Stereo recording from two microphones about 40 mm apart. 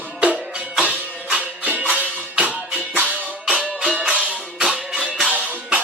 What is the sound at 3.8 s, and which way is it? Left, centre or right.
Music, centre.